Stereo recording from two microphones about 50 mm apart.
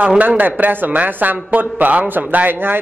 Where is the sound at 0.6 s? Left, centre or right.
Right.